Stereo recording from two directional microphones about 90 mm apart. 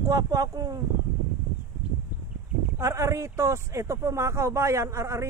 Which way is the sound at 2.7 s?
35° right (ahead or behind).